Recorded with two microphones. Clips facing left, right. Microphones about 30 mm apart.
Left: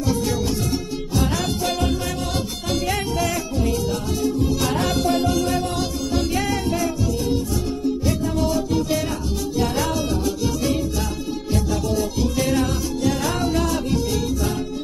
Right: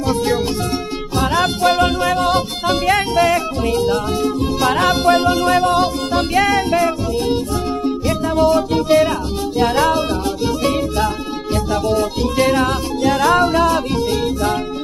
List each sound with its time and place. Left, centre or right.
1.1 s music: right
5.5 s music: right